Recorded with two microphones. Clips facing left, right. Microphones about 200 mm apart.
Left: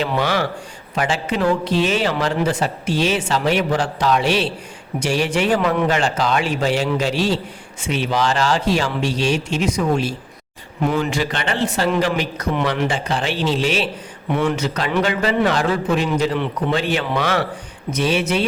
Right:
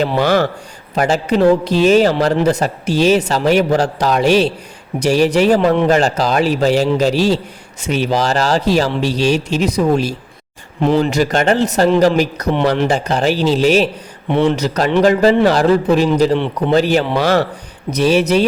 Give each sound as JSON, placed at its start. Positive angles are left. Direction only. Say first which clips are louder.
{"t": 0.0, "sound": "a man's voice", "louder": "right 6 dB", "side_deg": -45}
{"t": 14.3, "sound": "a man's voice", "louder": "right 5 dB", "side_deg": -30}